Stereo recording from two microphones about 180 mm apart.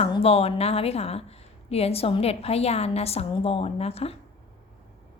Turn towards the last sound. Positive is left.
turn(degrees=35)  # may be behind; listen again after turning